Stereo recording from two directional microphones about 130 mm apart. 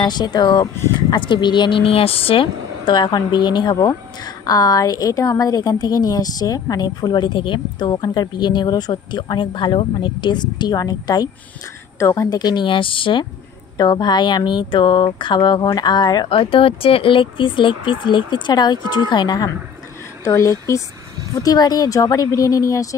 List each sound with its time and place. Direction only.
0.0 s speech: 35° left (ahead or behind)
0.7 s speech: 20° left (ahead or behind)
1.1 s speech: 35° left (ahead or behind)